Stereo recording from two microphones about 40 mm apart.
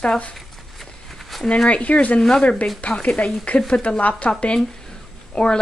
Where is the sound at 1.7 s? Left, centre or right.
Left.